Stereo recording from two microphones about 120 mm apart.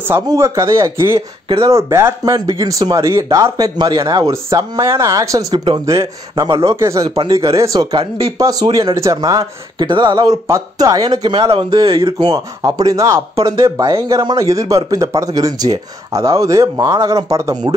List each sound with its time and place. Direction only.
0.3 s speech: 25° right (ahead or behind)
1.1 s speech: 50° right (ahead or behind)
1.7 s speech: 25° right (ahead or behind)
2.3 s speech: 35° right (ahead or behind)
9.8 s speech: 40° right (ahead or behind)
10.3 s speech: 25° right (ahead or behind); by 12.4 s 45° right (ahead or behind)
12.6 s speech: 30° right (ahead or behind)